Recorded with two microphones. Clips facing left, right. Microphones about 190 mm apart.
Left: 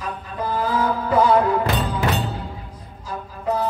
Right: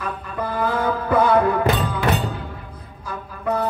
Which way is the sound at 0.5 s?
55° right (ahead or behind).